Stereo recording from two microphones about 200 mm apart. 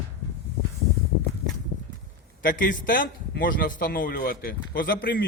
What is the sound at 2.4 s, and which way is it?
A man's voice, 45° left (ahead or behind).